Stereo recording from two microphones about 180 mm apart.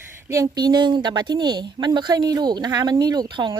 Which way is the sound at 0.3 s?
20° right (ahead or behind).